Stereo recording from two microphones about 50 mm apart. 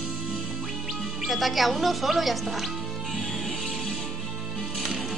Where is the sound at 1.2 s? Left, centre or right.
Centre.